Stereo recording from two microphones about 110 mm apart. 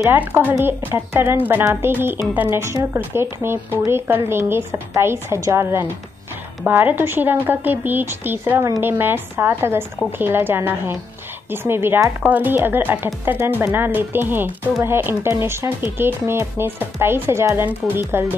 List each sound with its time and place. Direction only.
0.1 s a woman's voice: 15° right (ahead or behind)